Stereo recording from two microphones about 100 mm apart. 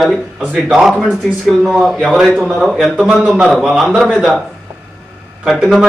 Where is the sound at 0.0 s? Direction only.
Centre (ahead or behind).